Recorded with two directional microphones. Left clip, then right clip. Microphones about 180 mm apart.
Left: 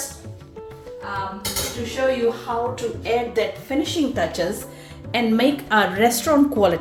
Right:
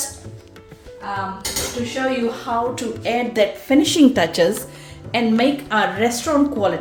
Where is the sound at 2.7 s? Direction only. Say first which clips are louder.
Right 1 dB; 75° right (ahead or behind); by 4.5 s 50° right (ahead or behind).